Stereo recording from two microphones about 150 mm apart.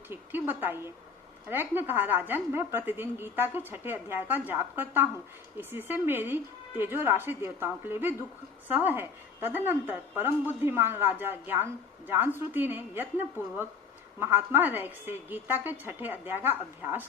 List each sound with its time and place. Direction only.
0.1 s a woman's voice: 15° right (ahead or behind)
14.2 s a woman's voice: 15° right (ahead or behind)